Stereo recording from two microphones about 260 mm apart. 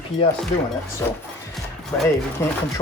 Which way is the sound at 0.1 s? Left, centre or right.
Centre.